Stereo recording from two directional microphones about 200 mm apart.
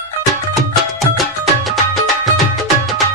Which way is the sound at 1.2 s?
Centre (ahead or behind).